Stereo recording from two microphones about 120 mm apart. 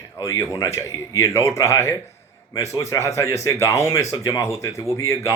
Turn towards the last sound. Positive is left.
turn(degrees=25)  # may be behind; listen again after turning